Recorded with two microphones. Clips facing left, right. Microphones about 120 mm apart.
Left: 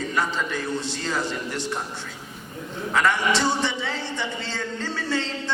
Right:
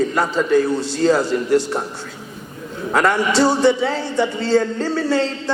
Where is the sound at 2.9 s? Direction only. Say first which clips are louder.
Right 5 dB; 40° right (ahead or behind).